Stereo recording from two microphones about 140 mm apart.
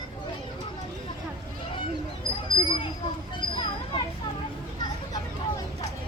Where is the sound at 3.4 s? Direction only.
35° left (ahead or behind).